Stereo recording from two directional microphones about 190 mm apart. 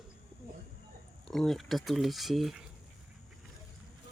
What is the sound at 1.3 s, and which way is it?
Speech, centre (ahead or behind).